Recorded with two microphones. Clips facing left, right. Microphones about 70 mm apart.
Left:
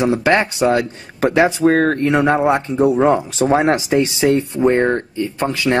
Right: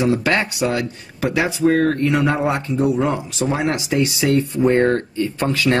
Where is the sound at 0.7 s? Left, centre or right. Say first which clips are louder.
Left 5 dB; left.